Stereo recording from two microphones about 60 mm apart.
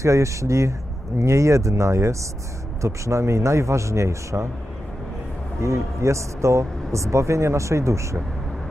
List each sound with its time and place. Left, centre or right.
0.0 s speech: right
5.5 s speech: right